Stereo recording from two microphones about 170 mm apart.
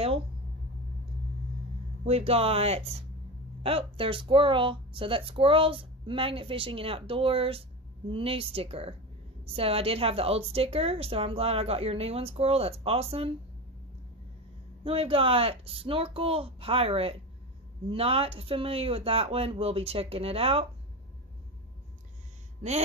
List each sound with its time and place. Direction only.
2.0 s speech: 35° right (ahead or behind)
14.8 s speech: 35° right (ahead or behind)